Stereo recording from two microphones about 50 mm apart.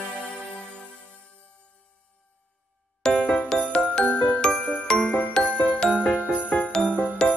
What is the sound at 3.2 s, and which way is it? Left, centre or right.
Music, left.